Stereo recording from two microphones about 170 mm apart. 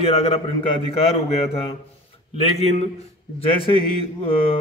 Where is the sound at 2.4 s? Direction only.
40° left (ahead or behind).